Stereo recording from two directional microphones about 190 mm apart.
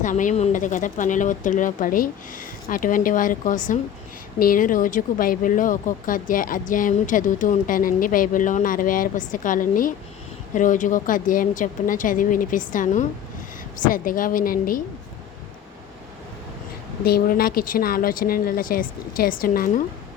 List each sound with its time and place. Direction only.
0.0 s speech: 40° left (ahead or behind)
17.2 s speech: 50° left (ahead or behind)